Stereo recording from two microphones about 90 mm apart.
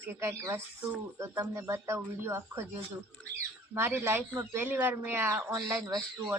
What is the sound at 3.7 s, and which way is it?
Speech, 25° right (ahead or behind).